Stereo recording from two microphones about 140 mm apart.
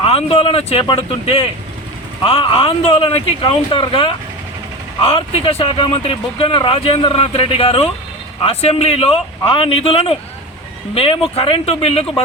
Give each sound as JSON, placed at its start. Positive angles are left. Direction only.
{"t": 0.0, "sound": "speech", "side_deg": 40}